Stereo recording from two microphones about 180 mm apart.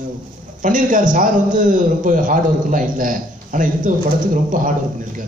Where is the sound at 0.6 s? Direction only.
45° right (ahead or behind).